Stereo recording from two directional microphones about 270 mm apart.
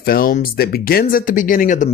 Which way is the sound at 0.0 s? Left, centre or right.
Left.